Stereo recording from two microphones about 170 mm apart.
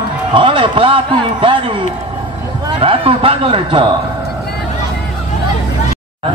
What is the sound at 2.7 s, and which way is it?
A man's voice, 35° right (ahead or behind).